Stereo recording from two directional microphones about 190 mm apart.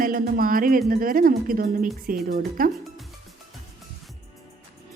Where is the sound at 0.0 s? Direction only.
50° right (ahead or behind).